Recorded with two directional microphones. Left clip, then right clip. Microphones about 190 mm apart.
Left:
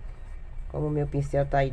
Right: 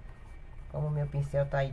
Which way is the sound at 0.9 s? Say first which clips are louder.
Left 5 dB; 35° left (ahead or behind).